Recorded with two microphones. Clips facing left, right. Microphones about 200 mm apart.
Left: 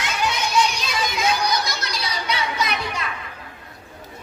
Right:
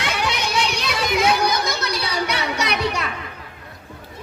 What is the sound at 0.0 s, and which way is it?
Music, 65° right (ahead or behind).